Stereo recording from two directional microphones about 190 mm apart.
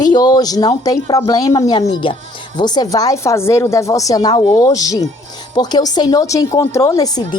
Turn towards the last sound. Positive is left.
turn(degrees=20)  # may be behind; listen again after turning